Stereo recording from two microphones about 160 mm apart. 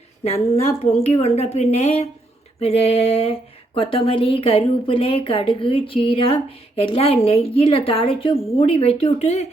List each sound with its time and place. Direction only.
0.3 s a woman's voice: 40° left (ahead or behind)